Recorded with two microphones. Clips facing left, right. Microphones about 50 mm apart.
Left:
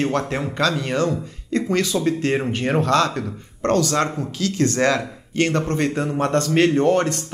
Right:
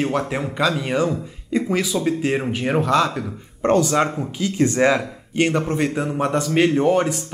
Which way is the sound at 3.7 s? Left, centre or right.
Centre.